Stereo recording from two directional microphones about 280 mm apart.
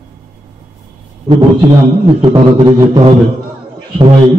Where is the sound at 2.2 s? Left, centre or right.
Centre.